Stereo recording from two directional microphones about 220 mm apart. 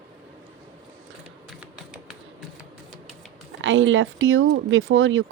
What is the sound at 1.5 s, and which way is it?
Typing, centre (ahead or behind).